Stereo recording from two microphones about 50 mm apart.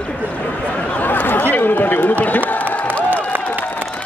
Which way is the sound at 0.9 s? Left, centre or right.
Left.